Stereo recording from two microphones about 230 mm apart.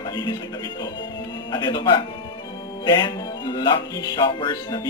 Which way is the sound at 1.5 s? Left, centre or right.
Centre.